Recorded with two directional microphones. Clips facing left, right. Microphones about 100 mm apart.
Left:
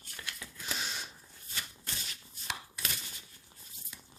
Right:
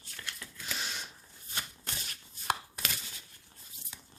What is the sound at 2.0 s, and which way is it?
Chopping, 45° right (ahead or behind).